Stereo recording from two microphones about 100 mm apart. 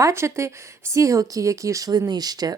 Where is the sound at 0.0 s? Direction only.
25° right (ahead or behind).